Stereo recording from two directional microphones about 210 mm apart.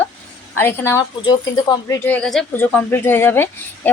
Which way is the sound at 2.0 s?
5° left (ahead or behind).